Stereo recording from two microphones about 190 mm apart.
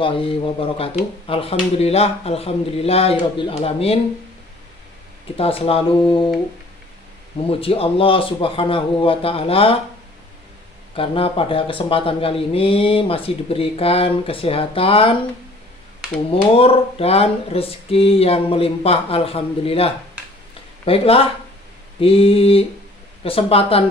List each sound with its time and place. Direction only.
0.0 s speech: 30° left (ahead or behind)
5.4 s speech: 30° left (ahead or behind)
7.4 s speech: 30° left (ahead or behind)
11.0 s speech: 30° left (ahead or behind)
16.5 s speech: 30° left (ahead or behind)